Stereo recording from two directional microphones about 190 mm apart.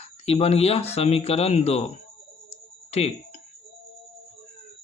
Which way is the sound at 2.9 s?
35° left (ahead or behind).